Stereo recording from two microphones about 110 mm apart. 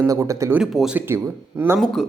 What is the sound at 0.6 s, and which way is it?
Speech, centre (ahead or behind).